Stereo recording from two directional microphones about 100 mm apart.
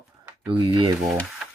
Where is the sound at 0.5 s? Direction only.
55° right (ahead or behind).